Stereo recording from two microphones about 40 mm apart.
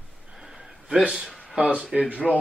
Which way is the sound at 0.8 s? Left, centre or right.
Right.